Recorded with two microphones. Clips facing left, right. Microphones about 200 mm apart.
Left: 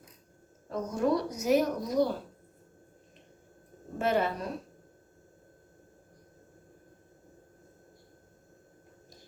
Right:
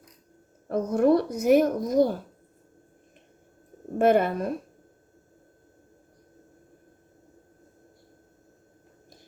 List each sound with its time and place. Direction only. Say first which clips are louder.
0.7 s a woman's voice: right 7 dB; 55° right (ahead or behind)
3.9 s speech: right 7 dB; 55° right (ahead or behind)